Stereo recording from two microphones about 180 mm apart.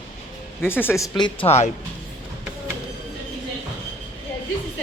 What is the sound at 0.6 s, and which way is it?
Speech, 10° left (ahead or behind).